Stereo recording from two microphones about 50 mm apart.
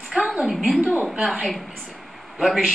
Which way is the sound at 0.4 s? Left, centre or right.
Centre.